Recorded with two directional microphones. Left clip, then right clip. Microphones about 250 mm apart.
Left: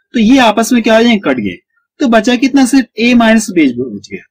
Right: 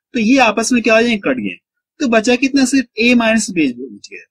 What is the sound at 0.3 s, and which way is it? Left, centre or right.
Speech, centre.